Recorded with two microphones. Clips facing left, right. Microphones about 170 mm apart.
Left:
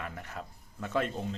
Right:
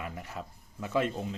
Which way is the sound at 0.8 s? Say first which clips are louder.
Right 2 dB; 50° left (ahead or behind).